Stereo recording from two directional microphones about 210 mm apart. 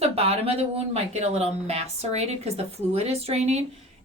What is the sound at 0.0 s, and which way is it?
A woman's voice, 30° right (ahead or behind).